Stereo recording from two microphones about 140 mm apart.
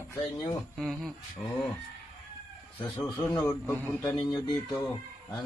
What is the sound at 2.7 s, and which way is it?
A man's voice, 15° left (ahead or behind).